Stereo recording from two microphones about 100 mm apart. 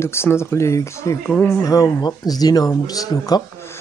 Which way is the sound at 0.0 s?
25° left (ahead or behind).